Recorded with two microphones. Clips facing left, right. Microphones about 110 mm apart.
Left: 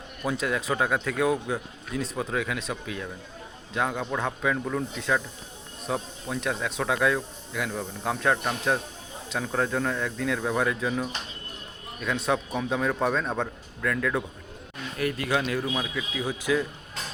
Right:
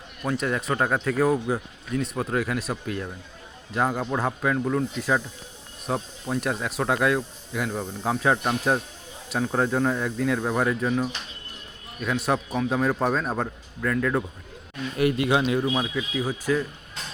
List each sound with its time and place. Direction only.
0.2 s speech: centre (ahead or behind)
7.5 s speech: 15° right (ahead or behind)
7.8 s speech: 5° right (ahead or behind)
8.4 s speech: 20° right (ahead or behind); by 14.3 s 5° right (ahead or behind)
15.3 s speech: 15° right (ahead or behind)
16.0 s speech: 10° right (ahead or behind)